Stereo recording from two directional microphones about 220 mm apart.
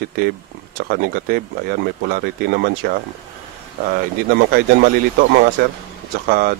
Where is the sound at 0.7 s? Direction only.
45° right (ahead or behind).